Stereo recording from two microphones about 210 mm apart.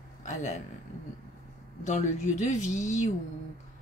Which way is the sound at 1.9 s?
35° left (ahead or behind).